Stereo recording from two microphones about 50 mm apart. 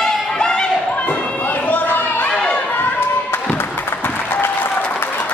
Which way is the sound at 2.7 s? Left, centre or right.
Left.